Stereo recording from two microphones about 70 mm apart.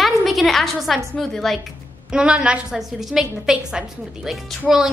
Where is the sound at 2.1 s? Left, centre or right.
Centre.